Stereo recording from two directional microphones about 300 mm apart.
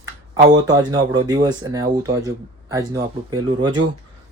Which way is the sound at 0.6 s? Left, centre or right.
Centre.